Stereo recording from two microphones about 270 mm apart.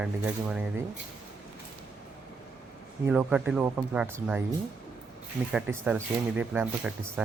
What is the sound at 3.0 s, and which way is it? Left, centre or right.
Speech, centre.